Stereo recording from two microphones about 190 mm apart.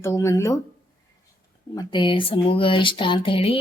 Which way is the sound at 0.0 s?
15° left (ahead or behind).